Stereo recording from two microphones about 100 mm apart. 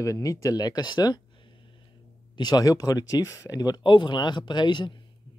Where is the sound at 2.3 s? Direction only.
40° left (ahead or behind).